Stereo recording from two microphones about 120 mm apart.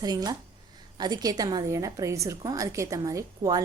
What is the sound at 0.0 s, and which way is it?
A woman's voice, 35° right (ahead or behind).